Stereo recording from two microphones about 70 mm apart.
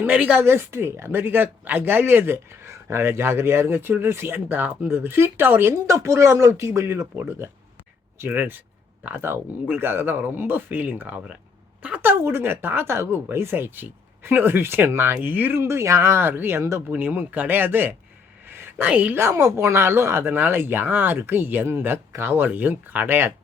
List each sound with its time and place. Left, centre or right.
0.0 s speech: centre
0.4 s speech: right
15.6 s speech: right
16.9 s speech: right
18.4 s a sound: right
18.9 s speech: right
19.3 s speech: right